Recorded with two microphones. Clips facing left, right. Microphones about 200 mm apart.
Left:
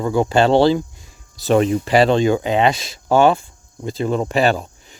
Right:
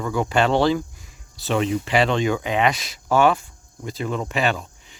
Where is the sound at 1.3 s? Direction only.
40° left (ahead or behind).